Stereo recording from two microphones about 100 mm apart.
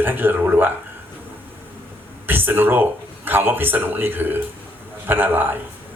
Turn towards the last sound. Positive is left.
turn(degrees=-20)  # may be behind; listen again after turning